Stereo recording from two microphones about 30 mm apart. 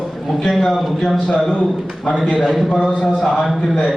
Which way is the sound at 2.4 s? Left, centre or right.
Centre.